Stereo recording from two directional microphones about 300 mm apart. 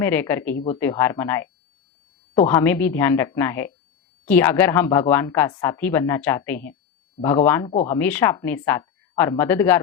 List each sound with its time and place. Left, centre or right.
0.0 s speech: centre